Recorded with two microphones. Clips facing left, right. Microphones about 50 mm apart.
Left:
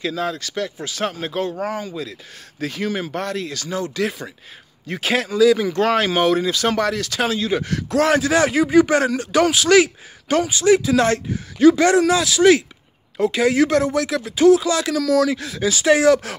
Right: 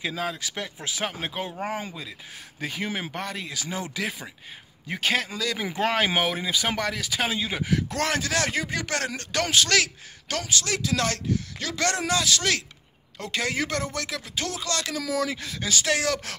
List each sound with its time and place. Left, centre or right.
0.0 s speech: centre
1.6 s speech: right
2.6 s speech: centre
4.0 s speech: centre
5.6 s speech: centre
7.9 s speech: centre
15.0 s speech: centre